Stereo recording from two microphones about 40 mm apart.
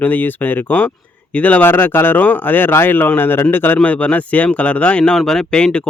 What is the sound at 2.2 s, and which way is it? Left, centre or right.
Speech, left.